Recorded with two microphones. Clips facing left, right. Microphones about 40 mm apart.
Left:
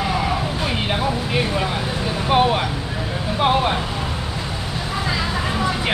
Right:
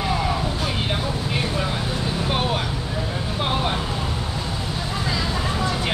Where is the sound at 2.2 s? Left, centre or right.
Centre.